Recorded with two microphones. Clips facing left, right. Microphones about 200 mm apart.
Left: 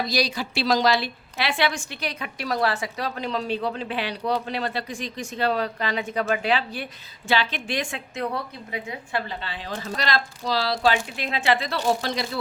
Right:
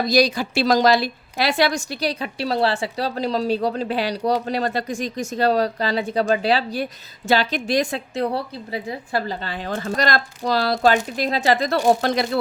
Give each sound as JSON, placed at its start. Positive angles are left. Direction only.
{"t": 0.0, "sound": "a woman's voice", "side_deg": -45}
{"t": 11.9, "sound": "speech", "side_deg": -55}